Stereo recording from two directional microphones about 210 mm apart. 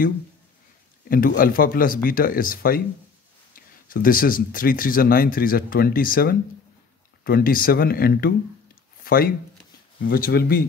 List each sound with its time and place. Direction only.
1.0 s speech: 45° left (ahead or behind)